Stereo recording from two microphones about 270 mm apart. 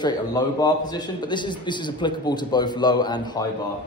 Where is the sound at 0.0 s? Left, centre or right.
Centre.